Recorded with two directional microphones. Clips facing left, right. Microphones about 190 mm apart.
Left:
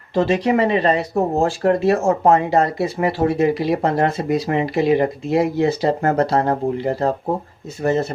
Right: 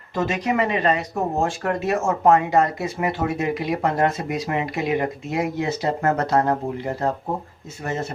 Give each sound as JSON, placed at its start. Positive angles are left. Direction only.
{"t": 0.1, "sound": "speech", "side_deg": 30}